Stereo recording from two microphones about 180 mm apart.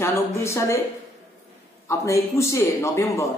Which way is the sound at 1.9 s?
15° left (ahead or behind).